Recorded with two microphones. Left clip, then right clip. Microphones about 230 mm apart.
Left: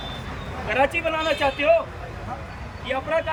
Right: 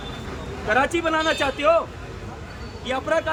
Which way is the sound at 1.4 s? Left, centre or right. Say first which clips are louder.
Left 2 dB; centre.